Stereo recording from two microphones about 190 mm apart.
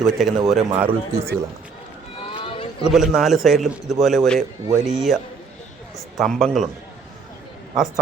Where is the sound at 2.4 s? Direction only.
30° left (ahead or behind).